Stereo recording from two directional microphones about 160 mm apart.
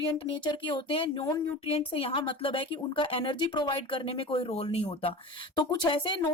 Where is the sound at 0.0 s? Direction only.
35° left (ahead or behind).